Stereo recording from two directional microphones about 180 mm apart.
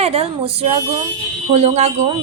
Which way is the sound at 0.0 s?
35° right (ahead or behind).